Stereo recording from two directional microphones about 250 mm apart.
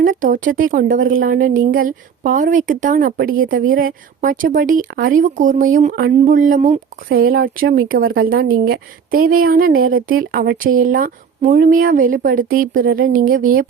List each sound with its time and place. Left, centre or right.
0.0 s a woman's voice: right